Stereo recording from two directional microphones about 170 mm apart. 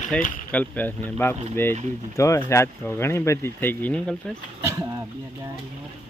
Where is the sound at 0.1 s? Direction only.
5° left (ahead or behind).